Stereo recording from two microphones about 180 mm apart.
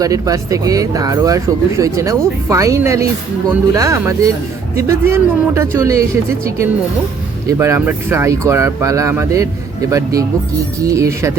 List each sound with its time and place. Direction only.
0.0 s speech: 20° right (ahead or behind)